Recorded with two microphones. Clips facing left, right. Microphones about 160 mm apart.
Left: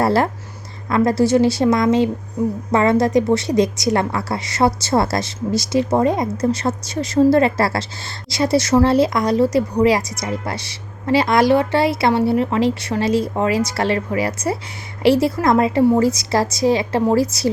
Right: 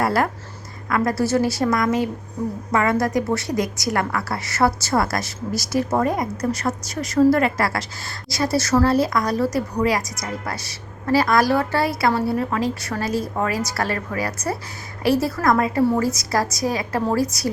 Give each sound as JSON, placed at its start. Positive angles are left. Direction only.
{"t": 0.0, "sound": "a woman's voice", "side_deg": 25}